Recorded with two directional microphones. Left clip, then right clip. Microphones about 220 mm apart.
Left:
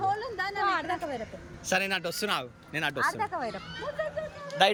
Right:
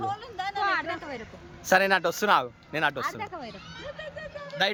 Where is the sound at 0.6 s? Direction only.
10° right (ahead or behind).